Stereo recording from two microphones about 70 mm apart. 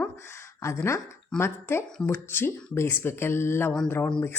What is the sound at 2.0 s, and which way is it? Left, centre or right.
Speech, left.